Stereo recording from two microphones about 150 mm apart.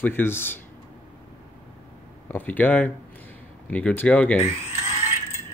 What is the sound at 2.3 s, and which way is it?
Speech, 10° left (ahead or behind).